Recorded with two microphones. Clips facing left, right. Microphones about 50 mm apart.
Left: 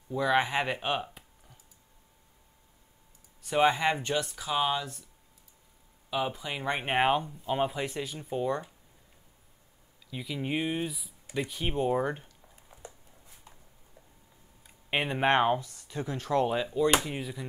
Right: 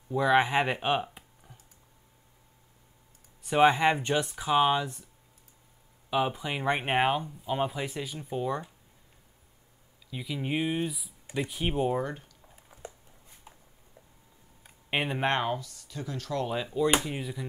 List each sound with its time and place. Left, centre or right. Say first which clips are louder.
0.1 s speech: right 3 dB; centre
3.4 s speech: right 3 dB; centre
6.0 s speech: right 3 dB; centre
7.1 s speech: left 1 dB; centre
10.1 s speech: right 1 dB; centre
12.0 s speech: left 3 dB; centre
12.5 s a sound: even; centre
14.9 s speech: even; centre
15.2 s speech: left 4 dB; left
16.4 s speech: left 1 dB; centre